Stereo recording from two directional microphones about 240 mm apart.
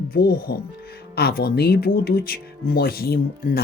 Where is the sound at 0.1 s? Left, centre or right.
Left.